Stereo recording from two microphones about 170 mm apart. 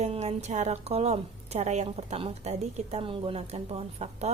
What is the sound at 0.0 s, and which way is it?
A woman's voice, 40° right (ahead or behind).